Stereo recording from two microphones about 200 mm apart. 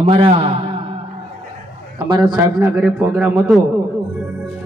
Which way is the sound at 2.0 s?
20° right (ahead or behind).